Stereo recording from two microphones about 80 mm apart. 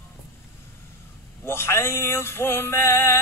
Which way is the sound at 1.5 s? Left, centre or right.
Left.